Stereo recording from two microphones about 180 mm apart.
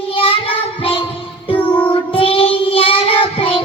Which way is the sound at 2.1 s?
30° left (ahead or behind).